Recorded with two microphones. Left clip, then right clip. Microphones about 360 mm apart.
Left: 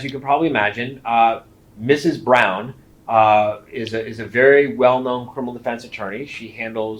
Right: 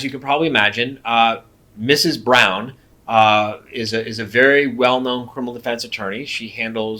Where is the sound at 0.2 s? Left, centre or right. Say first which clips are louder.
Right 1 dB; right.